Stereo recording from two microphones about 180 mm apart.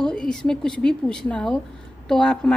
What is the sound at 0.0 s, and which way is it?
A woman's voice, 5° left (ahead or behind).